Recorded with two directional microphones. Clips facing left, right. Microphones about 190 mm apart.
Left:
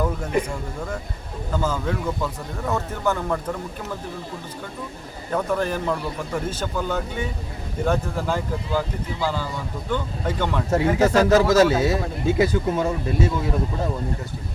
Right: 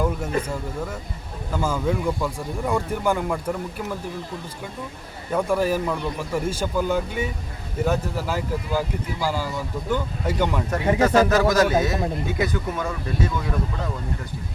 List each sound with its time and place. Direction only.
1.5 s speech: 10° right (ahead or behind)
5.3 s speech: 10° right (ahead or behind)
11.0 s a man's voice: 25° left (ahead or behind)